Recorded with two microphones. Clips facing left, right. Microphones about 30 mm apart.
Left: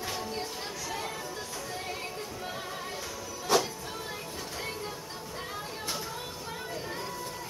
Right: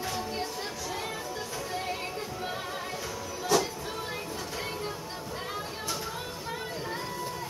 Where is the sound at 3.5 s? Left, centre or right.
Left.